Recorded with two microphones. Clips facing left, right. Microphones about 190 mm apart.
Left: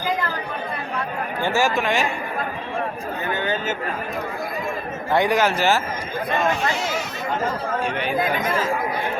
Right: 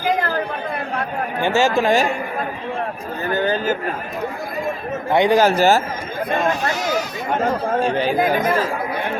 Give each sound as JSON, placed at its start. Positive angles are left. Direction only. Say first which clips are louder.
{"t": 1.4, "sound": "speech", "louder": "right 4 dB", "side_deg": -20}
{"t": 3.3, "sound": "speech", "louder": "right 7 dB", "side_deg": -35}
{"t": 5.1, "sound": "speech", "louder": "right 4 dB", "side_deg": -20}
{"t": 5.4, "sound": "speech", "louder": "right 5 dB", "side_deg": -40}
{"t": 7.9, "sound": "speech", "louder": "right 4 dB", "side_deg": -35}